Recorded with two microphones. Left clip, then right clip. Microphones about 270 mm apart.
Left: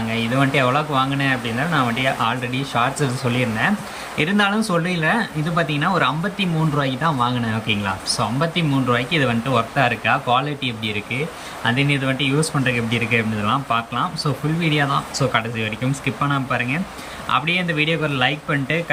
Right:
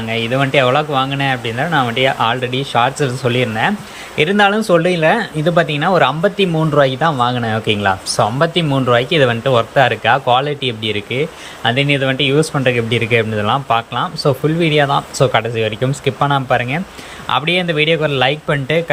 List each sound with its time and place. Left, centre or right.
0.1 s speech: centre